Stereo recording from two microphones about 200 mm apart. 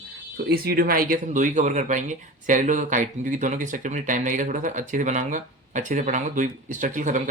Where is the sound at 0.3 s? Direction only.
50° right (ahead or behind).